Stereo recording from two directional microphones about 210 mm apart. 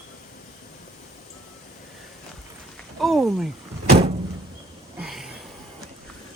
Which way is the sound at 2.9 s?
Centre (ahead or behind).